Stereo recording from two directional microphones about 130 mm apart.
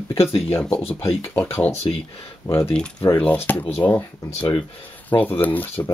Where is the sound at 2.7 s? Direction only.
10° left (ahead or behind).